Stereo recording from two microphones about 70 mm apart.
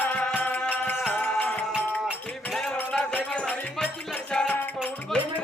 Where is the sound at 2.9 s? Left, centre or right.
Centre.